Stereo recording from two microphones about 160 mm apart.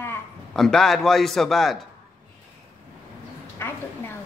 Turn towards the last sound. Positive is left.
turn(degrees=15)  # may be behind; listen again after turning